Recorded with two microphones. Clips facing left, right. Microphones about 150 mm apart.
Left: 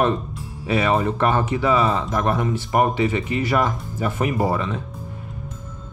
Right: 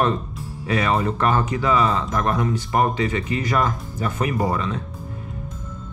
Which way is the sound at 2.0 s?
5° left (ahead or behind).